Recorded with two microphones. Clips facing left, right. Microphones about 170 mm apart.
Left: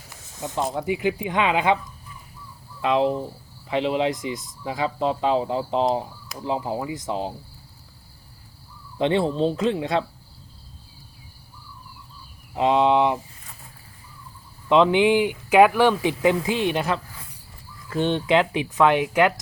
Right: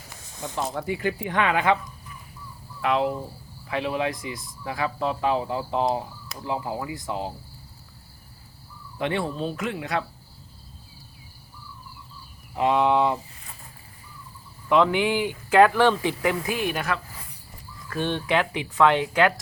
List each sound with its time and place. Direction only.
0.4 s speech: 20° left (ahead or behind)
2.8 s speech: 20° left (ahead or behind)
9.0 s speech: 25° left (ahead or behind)
12.5 s speech: 20° left (ahead or behind)
14.7 s speech: 20° left (ahead or behind)